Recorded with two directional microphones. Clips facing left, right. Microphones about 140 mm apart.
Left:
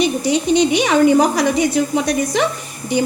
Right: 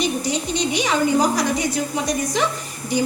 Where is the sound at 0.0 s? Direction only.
65° left (ahead or behind).